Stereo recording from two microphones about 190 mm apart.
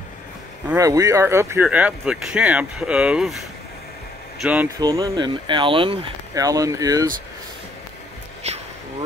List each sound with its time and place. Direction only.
0.7 s speech: 20° right (ahead or behind)
4.7 s speech: 20° right (ahead or behind)